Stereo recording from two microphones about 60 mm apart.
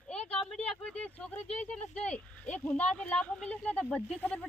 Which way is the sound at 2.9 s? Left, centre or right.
Centre.